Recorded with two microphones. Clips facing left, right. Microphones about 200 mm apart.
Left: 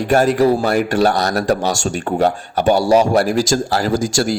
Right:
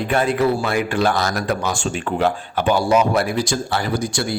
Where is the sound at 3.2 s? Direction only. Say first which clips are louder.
Left 5 dB; 90° left.